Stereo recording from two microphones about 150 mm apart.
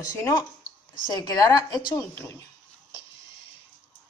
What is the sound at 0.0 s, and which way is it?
A woman's voice, 20° left (ahead or behind).